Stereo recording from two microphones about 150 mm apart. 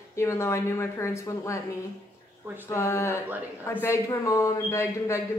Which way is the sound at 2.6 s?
20° left (ahead or behind).